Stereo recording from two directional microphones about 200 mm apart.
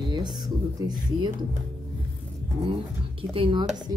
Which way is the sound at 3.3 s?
25° right (ahead or behind).